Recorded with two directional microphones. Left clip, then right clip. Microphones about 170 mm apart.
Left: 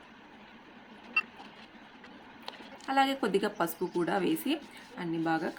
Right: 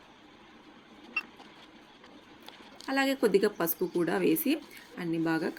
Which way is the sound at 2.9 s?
15° right (ahead or behind).